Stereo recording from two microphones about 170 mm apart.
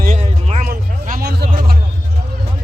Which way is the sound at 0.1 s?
40° right (ahead or behind).